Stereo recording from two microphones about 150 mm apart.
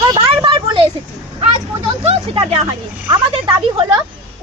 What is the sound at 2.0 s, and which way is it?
Speech, 40° right (ahead or behind).